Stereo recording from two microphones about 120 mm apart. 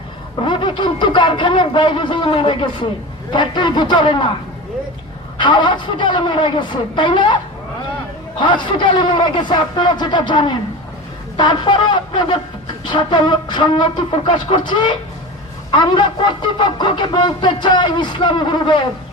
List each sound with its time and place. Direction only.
0.4 s a man's voice: 40° left (ahead or behind)
5.4 s a man's voice: 40° left (ahead or behind)
8.4 s a man's voice: 40° left (ahead or behind)